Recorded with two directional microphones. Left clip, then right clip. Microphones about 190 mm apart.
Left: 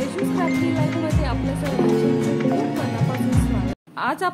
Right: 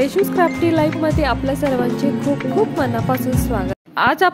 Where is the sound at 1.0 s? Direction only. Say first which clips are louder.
Right 8 dB; 35° right (ahead or behind).